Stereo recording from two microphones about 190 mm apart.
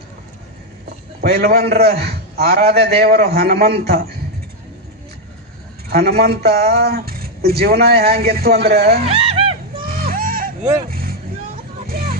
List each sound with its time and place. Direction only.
1.2 s a man's voice: 55° right (ahead or behind)
5.9 s speech: 55° right (ahead or behind)
9.1 s a sound: 30° right (ahead or behind)
9.8 s a sound: 50° right (ahead or behind)
10.9 s vehicle: 50° right (ahead or behind)
11.9 s hubbub: 50° right (ahead or behind)